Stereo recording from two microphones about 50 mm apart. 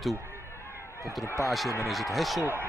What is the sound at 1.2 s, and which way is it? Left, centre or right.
Speech, left.